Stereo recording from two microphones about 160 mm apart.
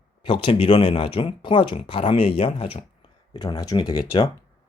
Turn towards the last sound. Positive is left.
turn(degrees=25)  # may be behind; listen again after turning